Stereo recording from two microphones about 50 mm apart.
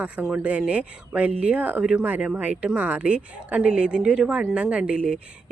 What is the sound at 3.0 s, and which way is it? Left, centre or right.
Speech, right.